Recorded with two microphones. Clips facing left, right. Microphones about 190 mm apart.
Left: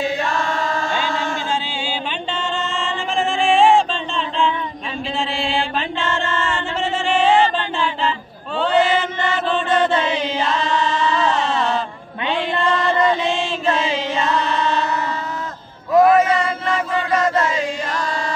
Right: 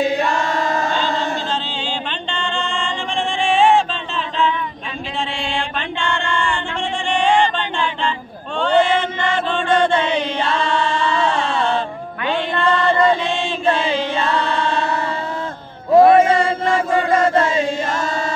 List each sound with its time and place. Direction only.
2.3 s singing: 5° left (ahead or behind)
5.4 s mantra: centre (ahead or behind)
6.8 s music: 5° left (ahead or behind)
8.5 s a sound: 5° left (ahead or behind)
10.4 s music: 30° right (ahead or behind)
13.7 s child singing: 30° right (ahead or behind)
15.9 s a sound: 30° right (ahead or behind)
17.1 s chant: 30° right (ahead or behind)